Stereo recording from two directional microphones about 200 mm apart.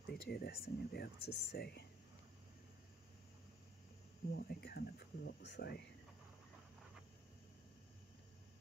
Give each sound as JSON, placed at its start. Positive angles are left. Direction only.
{"t": 0.0, "sound": "speech", "side_deg": 55}
{"t": 4.3, "sound": "speech", "side_deg": 55}